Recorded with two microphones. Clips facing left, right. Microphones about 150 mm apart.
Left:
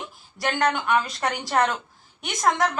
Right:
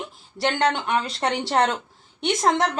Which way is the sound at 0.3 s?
30° right (ahead or behind).